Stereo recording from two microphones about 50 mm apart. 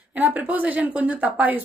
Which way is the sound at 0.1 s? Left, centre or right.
Right.